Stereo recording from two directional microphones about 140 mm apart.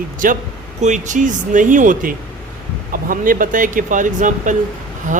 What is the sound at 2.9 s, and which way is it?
A man's voice, 80° right.